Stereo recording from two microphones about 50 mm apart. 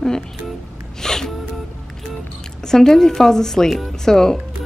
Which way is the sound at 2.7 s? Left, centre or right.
Centre.